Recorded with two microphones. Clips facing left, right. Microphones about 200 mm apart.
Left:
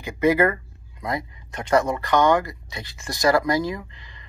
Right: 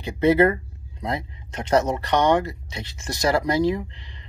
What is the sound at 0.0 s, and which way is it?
Speech, 25° right (ahead or behind).